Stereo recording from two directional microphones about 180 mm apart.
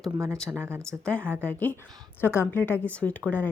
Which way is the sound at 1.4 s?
10° left (ahead or behind).